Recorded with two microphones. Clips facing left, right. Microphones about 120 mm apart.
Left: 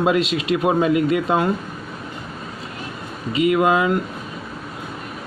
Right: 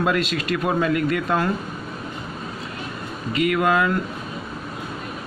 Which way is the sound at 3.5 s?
15° left (ahead or behind).